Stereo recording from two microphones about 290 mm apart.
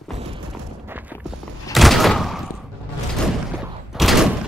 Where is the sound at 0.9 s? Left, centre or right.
Centre.